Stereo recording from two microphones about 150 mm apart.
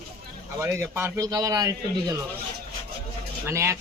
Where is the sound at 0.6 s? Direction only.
15° right (ahead or behind).